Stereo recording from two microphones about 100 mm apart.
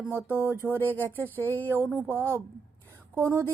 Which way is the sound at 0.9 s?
20° left (ahead or behind).